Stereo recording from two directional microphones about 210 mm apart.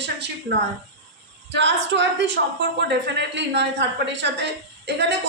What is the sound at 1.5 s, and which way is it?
Speech, 55° right (ahead or behind).